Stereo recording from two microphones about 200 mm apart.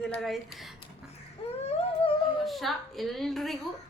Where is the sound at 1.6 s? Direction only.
30° left (ahead or behind).